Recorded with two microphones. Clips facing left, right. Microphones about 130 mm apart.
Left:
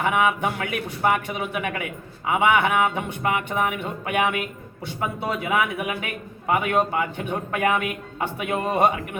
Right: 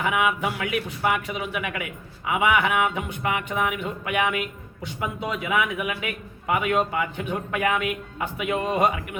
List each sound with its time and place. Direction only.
0.0 s speech: 35° left (ahead or behind)